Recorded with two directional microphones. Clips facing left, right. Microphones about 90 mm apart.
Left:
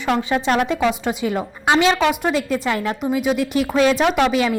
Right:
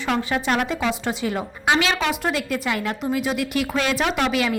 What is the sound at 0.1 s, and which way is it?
A woman's voice, 20° left (ahead or behind).